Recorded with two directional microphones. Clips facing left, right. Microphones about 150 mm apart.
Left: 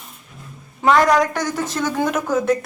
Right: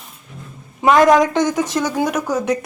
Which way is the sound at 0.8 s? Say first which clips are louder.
Right 3 dB; 20° right (ahead or behind).